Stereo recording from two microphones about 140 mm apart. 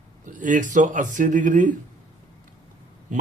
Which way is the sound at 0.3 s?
65° right (ahead or behind).